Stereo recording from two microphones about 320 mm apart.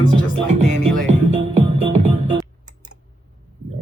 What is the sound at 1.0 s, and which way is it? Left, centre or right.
Music, centre.